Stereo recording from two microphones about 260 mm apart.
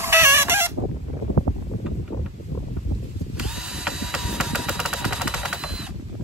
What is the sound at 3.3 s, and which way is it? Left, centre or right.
Drill, centre.